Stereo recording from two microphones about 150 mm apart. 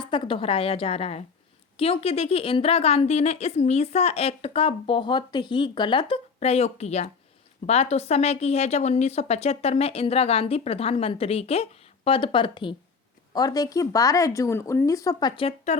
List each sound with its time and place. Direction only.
0.0 s a woman's voice: 35° left (ahead or behind)
15.4 s a woman's voice: 45° left (ahead or behind)